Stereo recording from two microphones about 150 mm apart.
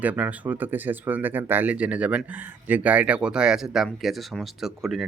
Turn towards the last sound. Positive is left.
turn(degrees=0)  # may be behind; listen again after turning